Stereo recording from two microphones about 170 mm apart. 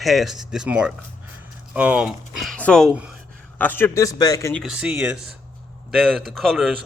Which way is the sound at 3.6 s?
10° left (ahead or behind).